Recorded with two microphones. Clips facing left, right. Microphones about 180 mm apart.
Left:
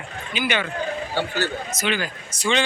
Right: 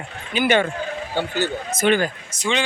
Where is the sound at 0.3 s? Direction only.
45° right (ahead or behind).